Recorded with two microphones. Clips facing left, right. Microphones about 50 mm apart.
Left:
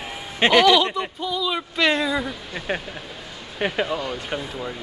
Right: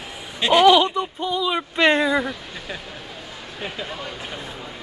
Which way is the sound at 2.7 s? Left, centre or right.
Left.